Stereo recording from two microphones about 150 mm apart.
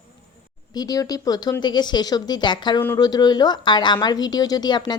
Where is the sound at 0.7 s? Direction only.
25° left (ahead or behind).